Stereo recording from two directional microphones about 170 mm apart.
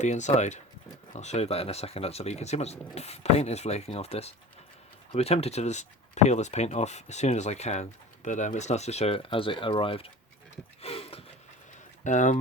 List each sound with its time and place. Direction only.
0.0 s speech: 45° left (ahead or behind)
10.8 s a sound: 35° left (ahead or behind)
12.0 s speech: 45° left (ahead or behind)